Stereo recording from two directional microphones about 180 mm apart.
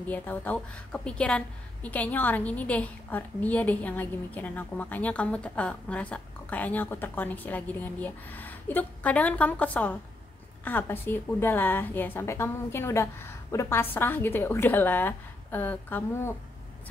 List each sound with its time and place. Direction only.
0.1 s a woman's voice: 10° left (ahead or behind)